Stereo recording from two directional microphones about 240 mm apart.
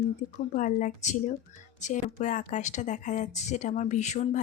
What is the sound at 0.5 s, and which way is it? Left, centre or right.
A woman's voice, left.